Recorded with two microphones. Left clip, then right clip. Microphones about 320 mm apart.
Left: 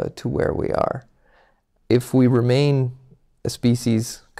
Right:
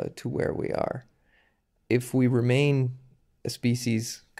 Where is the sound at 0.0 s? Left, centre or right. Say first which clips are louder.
Left 7 dB; left.